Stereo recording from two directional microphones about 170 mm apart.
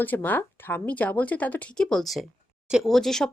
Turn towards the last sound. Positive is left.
turn(degrees=5)  # may be behind; listen again after turning